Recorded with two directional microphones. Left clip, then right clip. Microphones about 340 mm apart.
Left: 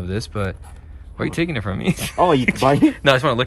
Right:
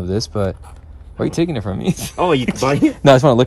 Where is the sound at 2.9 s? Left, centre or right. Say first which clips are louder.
Right 5 dB; centre.